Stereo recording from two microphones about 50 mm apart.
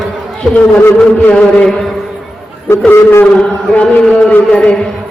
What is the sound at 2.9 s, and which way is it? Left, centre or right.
Speech, left.